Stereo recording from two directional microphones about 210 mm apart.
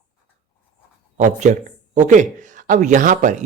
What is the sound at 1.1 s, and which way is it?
A man's voice, 35° right (ahead or behind).